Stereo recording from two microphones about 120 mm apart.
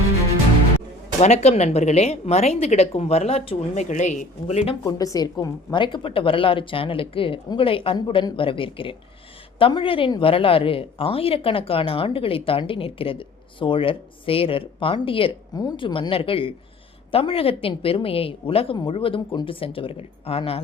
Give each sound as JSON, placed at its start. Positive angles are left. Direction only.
{"t": 1.2, "sound": "a woman's voice", "side_deg": 65}
{"t": 3.8, "sound": "speech", "side_deg": 80}
{"t": 4.8, "sound": "speech", "side_deg": 30}
{"t": 15.5, "sound": "speech", "side_deg": 35}